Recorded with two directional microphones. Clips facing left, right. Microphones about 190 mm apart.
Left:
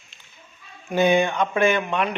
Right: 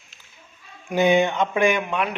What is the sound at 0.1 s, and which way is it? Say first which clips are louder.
Children playing: even; 5° right (ahead or behind).